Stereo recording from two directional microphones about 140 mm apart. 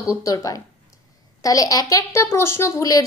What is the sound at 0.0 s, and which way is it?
Speech, 20° left (ahead or behind).